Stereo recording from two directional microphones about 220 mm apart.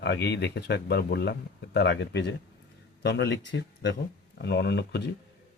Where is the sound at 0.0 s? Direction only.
50° left (ahead or behind).